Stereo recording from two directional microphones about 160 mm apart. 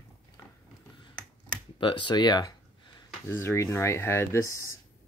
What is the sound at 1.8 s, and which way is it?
Speech, 30° left (ahead or behind).